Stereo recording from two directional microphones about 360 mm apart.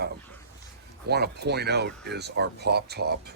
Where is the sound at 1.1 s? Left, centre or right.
Right.